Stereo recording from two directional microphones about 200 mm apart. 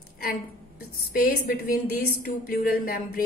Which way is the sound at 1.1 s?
50° left (ahead or behind).